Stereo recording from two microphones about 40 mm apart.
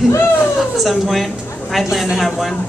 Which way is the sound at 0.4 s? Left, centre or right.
Centre.